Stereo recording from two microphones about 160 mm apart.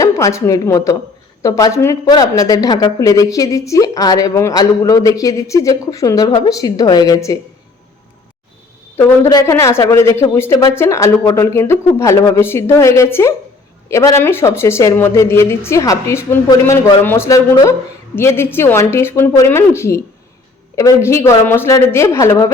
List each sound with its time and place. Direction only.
0.0 s a woman's voice: 20° left (ahead or behind)
9.0 s speech: 20° left (ahead or behind)